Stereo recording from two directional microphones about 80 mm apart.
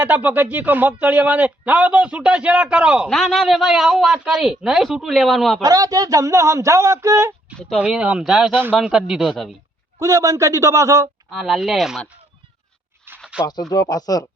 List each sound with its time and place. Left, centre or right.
0.0 s speech: right
3.1 s speech: centre
5.6 s speech: right
7.8 s speech: centre
10.0 s speech: right
11.3 s speech: centre
13.1 s a sound: right
13.5 s speech: left